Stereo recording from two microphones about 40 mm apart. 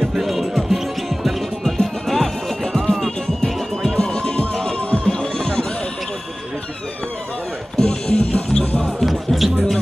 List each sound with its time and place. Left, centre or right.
0.2 s music: centre
1.6 s music: centre
7.7 s music: centre
9.0 s music: centre